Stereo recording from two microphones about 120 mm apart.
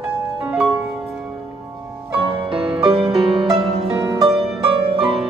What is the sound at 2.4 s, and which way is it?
Music, 45° right (ahead or behind).